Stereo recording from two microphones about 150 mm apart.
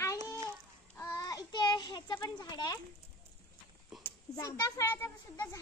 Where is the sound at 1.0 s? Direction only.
20° left (ahead or behind).